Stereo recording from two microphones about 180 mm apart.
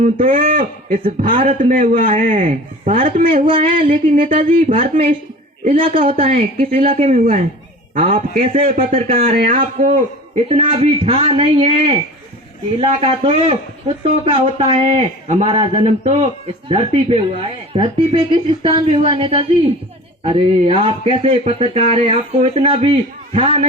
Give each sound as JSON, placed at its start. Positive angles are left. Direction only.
{"t": 0.0, "sound": "a man's voice", "side_deg": -50}
{"t": 3.4, "sound": "a sound", "side_deg": -30}
{"t": 4.0, "sound": "a man's voice", "side_deg": -45}
{"t": 4.7, "sound": "a man's voice", "side_deg": -30}
{"t": 9.1, "sound": "a man's voice", "side_deg": -55}
{"t": 10.5, "sound": "a man's voice", "side_deg": -30}